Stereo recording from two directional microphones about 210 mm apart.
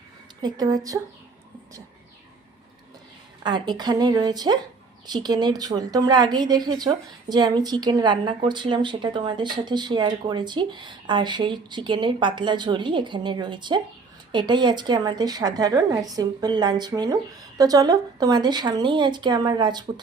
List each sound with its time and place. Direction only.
0.4 s speech: 20° right (ahead or behind)
3.4 s a woman's voice: 20° right (ahead or behind)